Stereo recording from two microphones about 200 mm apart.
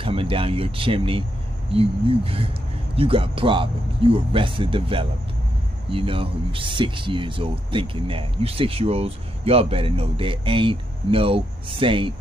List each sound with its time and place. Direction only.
0.0 s speech: 25° right (ahead or behind)